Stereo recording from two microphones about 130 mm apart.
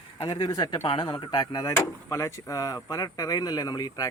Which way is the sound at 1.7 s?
20° left (ahead or behind).